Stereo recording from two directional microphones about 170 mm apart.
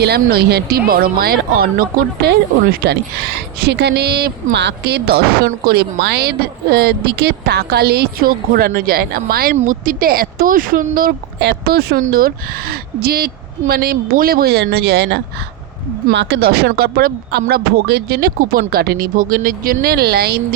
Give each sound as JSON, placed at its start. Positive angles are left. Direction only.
{"t": 0.0, "sound": "speech", "side_deg": -70}